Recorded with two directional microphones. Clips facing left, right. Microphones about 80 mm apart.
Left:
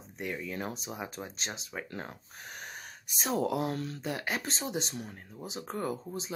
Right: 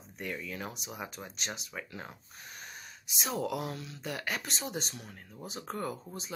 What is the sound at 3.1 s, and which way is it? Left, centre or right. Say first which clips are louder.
Speech: left 4 dB; left.